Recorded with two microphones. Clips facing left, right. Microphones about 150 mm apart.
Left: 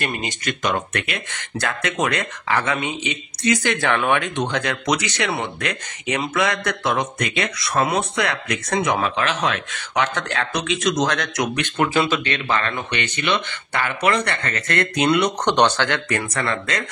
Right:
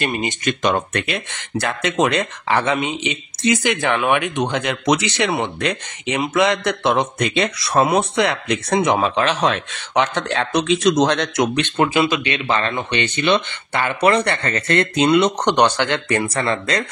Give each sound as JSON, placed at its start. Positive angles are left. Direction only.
{"t": 0.0, "sound": "speech", "side_deg": -20}
{"t": 16.1, "sound": "speech", "side_deg": -30}